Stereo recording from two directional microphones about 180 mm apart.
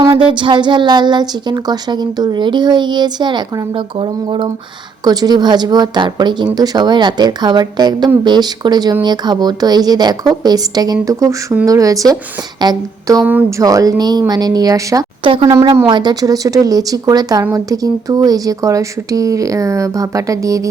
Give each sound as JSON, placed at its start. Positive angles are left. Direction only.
{"t": 0.0, "sound": "speech", "side_deg": -30}
{"t": 13.2, "sound": "speech", "side_deg": -10}
{"t": 13.7, "sound": "speech", "side_deg": -20}